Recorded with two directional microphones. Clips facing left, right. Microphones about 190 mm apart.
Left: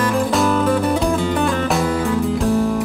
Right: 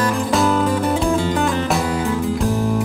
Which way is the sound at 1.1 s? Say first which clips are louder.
Even; 20° right (ahead or behind).